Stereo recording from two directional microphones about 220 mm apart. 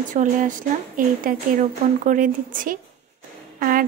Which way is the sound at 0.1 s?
35° right (ahead or behind).